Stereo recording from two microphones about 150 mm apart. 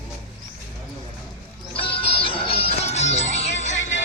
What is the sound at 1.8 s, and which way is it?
Music, 40° left (ahead or behind).